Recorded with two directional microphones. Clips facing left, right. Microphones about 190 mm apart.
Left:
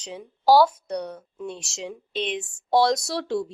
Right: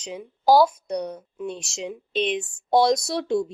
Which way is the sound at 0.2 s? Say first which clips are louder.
Even; 15° right (ahead or behind).